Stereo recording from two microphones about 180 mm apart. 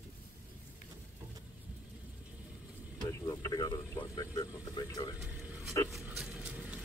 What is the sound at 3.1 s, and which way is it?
Speech, 20° left (ahead or behind).